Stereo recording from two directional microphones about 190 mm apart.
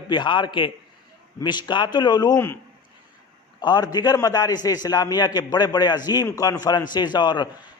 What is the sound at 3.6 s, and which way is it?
A man's voice, 20° left (ahead or behind).